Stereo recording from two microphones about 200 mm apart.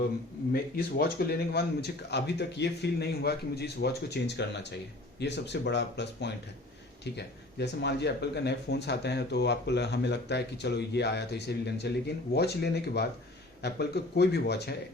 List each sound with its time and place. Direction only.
0.5 s speech: 50° left (ahead or behind)